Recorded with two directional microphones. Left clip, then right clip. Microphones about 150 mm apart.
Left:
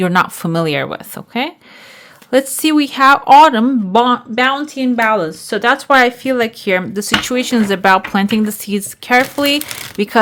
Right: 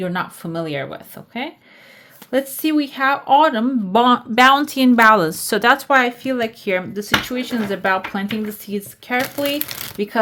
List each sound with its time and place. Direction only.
0.0 s speech: 55° left (ahead or behind); by 3.8 s 35° left (ahead or behind)
3.9 s speech: 10° left (ahead or behind)
4.5 s speech: 20° right (ahead or behind)
5.9 s speech: 25° left (ahead or behind); by 10.1 s 45° left (ahead or behind)